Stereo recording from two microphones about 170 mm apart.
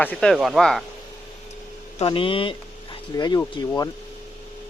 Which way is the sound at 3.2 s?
20° left (ahead or behind).